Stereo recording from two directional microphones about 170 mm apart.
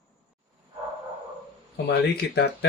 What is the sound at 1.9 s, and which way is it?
Speech, 70° left (ahead or behind).